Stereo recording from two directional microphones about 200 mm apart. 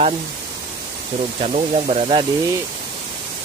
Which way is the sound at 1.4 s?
30° right (ahead or behind).